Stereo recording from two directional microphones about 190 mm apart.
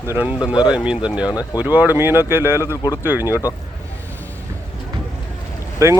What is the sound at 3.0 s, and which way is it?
Speech, 10° right (ahead or behind).